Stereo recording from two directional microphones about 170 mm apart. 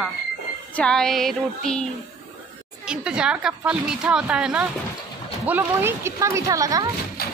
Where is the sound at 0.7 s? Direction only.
5° left (ahead or behind).